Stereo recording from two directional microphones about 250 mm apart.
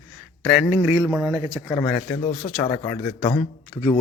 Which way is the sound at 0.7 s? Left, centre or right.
Centre.